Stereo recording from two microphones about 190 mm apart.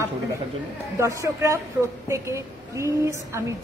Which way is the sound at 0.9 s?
15° right (ahead or behind).